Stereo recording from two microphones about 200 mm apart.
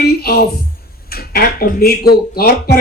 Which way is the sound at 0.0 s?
50° left (ahead or behind).